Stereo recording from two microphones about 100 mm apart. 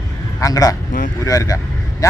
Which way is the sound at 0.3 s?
35° left (ahead or behind).